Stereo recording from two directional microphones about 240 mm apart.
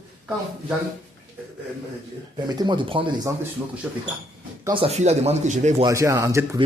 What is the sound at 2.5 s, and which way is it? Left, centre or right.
Speech, centre.